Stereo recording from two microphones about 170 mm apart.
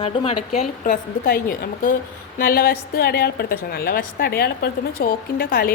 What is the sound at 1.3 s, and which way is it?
A woman's voice, 55° left (ahead or behind).